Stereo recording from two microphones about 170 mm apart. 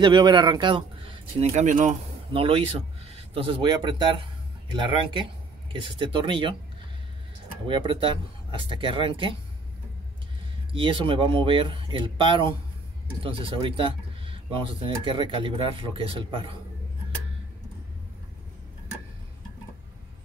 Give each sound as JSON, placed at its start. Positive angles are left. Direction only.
{"t": 0.0, "sound": "speech", "side_deg": -25}
{"t": 1.5, "sound": "speech", "side_deg": -45}
{"t": 2.3, "sound": "speech", "side_deg": -30}
{"t": 7.6, "sound": "speech", "side_deg": -30}
{"t": 10.7, "sound": "speech", "side_deg": -30}